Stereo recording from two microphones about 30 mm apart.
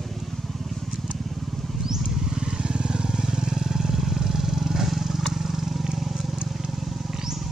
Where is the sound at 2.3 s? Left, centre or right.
Right; by 5.9 s centre.